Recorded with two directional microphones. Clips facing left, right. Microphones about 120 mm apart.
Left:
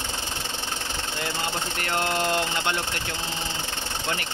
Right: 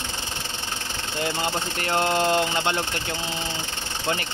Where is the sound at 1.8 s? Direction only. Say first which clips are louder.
Right 4 dB; 25° right (ahead or behind).